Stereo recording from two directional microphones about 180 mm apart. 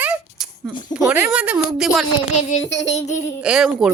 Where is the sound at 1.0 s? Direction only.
5° right (ahead or behind).